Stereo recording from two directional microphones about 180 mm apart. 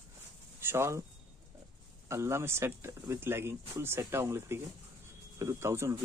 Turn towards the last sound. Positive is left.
turn(degrees=-15)  # may be behind; listen again after turning